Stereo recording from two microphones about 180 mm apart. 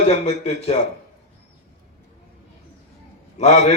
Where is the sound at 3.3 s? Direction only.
40° left (ahead or behind).